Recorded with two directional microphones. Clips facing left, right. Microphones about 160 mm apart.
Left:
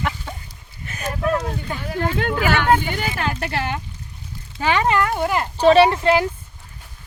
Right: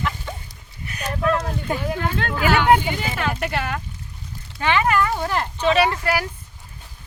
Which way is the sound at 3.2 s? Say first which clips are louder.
Even; 30° left (ahead or behind).